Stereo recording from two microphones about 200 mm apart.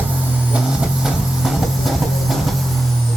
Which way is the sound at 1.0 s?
Centre (ahead or behind).